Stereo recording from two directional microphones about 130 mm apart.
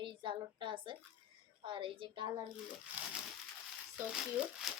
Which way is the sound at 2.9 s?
15° right (ahead or behind).